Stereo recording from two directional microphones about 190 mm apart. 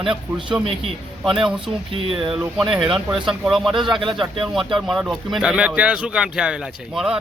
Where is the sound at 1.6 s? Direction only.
30° right (ahead or behind).